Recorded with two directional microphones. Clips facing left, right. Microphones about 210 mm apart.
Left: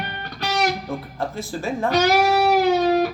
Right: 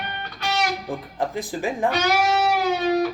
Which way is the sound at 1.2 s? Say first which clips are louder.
Right 3 dB; 15° right (ahead or behind).